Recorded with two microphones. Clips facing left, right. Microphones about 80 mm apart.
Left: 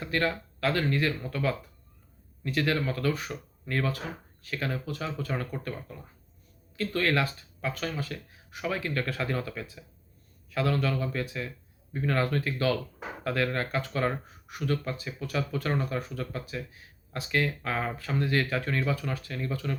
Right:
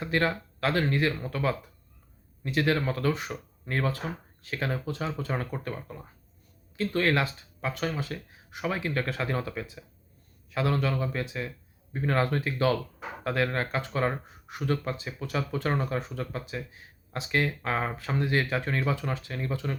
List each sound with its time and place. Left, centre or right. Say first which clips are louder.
0.0 s speech: right 2 dB; right